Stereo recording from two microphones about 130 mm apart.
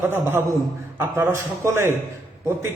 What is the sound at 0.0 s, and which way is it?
A man's voice, 15° right (ahead or behind).